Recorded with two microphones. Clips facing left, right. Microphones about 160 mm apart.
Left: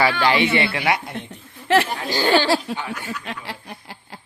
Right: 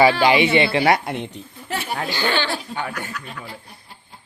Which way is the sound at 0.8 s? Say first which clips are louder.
Right 5 dB; 40° right (ahead or behind).